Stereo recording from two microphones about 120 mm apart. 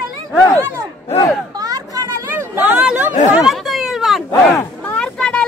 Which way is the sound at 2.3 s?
15° right (ahead or behind).